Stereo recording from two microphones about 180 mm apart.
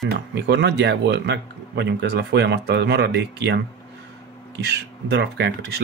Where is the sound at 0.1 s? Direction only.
75° right (ahead or behind).